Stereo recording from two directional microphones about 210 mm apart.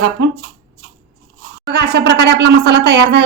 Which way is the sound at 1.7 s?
50° right (ahead or behind).